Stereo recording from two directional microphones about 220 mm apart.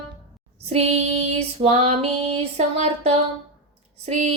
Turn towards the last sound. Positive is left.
turn(degrees=-30)  # may be behind; listen again after turning